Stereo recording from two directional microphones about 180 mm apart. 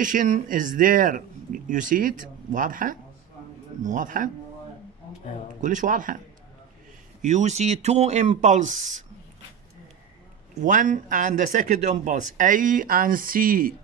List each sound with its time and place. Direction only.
0.0 s speech: 45° right (ahead or behind)
5.6 s speech: 45° right (ahead or behind)
10.5 s speech: 45° right (ahead or behind)